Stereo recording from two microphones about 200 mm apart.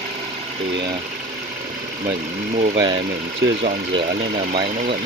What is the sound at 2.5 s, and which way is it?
Speech, 35° right (ahead or behind).